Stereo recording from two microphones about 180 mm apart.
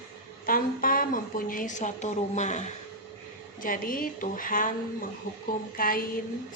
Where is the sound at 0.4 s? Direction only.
50° left (ahead or behind).